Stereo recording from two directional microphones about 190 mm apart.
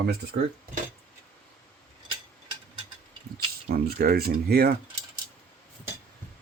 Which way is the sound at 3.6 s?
50° right (ahead or behind).